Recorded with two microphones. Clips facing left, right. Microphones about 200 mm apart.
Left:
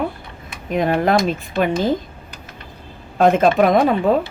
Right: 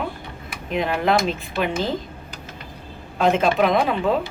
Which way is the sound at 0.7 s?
45° left (ahead or behind).